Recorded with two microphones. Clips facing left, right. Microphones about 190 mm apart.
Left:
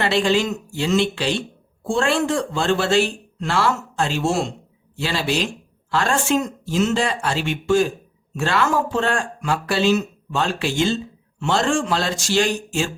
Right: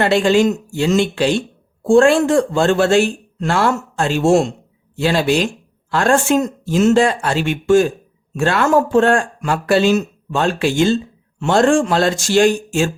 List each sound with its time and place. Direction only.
0.0 s speech: 45° right (ahead or behind)